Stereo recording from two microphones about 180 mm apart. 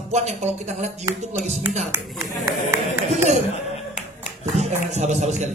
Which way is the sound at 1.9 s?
15° right (ahead or behind).